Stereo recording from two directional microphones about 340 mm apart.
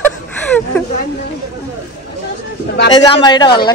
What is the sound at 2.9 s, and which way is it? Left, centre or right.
Speech, centre.